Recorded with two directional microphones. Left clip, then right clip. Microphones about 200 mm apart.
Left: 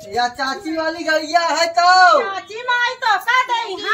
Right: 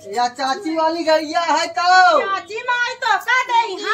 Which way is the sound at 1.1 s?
35° left (ahead or behind).